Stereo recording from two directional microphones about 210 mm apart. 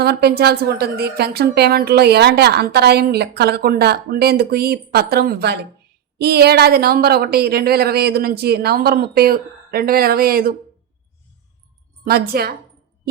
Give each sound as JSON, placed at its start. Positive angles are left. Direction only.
{"t": 0.0, "sound": "a woman's voice", "side_deg": -50}
{"t": 12.0, "sound": "a woman's voice", "side_deg": -45}